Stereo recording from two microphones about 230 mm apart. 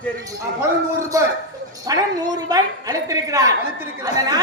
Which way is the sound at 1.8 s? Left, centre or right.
Centre.